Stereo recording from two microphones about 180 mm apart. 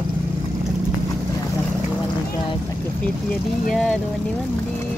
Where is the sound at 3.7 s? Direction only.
5° left (ahead or behind).